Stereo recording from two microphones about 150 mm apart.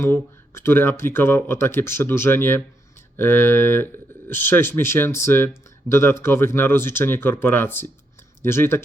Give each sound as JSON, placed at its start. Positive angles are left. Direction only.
{"t": 0.0, "sound": "speech", "side_deg": 15}